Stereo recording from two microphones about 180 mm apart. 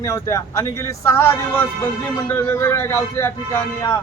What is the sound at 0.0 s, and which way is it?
Speech, 15° left (ahead or behind).